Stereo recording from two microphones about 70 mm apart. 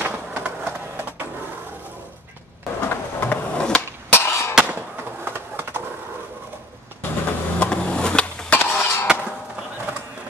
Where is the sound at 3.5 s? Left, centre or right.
Centre.